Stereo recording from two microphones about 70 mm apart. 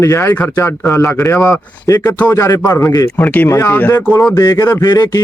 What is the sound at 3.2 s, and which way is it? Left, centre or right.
Speech, left.